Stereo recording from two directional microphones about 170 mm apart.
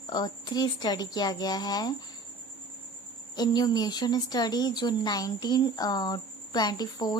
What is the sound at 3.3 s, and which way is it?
Speech, 25° left (ahead or behind).